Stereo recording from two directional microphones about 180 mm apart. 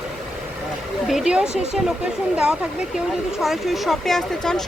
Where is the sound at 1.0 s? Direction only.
5° right (ahead or behind).